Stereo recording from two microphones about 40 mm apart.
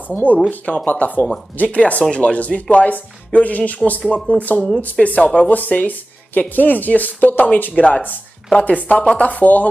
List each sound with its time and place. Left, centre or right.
0.1 s speech: left
2.0 s speech: left
2.3 s speech: left
5.5 s speech: left